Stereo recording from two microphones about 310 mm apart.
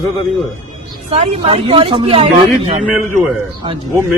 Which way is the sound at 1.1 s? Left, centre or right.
Centre.